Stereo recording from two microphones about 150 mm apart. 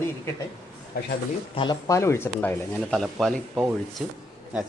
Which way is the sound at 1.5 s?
35° left (ahead or behind).